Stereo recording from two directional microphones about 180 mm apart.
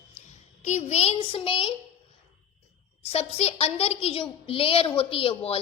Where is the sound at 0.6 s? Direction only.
40° left (ahead or behind).